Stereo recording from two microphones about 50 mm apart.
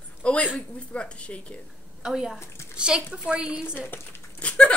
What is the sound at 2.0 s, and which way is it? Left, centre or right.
A woman's voice, centre.